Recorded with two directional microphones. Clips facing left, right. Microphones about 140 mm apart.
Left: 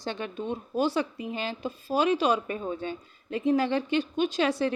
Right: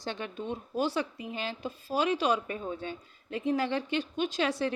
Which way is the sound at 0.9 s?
30° left (ahead or behind).